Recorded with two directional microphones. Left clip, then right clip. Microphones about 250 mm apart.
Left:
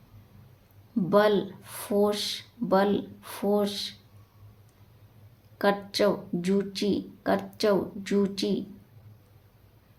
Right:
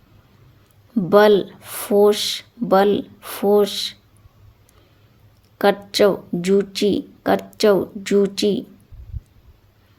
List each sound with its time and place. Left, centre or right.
0.9 s speech: right
5.5 s speech: right